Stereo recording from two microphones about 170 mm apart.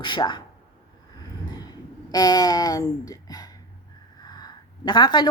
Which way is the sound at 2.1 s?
20° left (ahead or behind).